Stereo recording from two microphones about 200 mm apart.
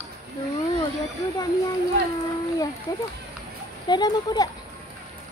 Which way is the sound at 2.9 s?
15° left (ahead or behind).